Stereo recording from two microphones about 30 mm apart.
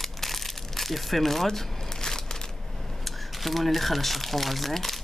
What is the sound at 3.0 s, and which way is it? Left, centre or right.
Crumpling, centre.